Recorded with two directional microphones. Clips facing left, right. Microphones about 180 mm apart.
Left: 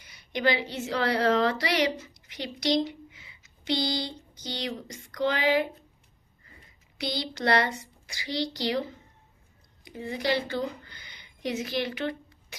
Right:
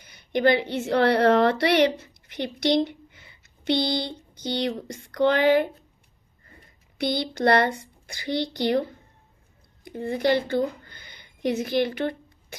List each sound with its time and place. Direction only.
0.0 s a woman's voice: 55° right (ahead or behind)
7.0 s a woman's voice: 55° right (ahead or behind)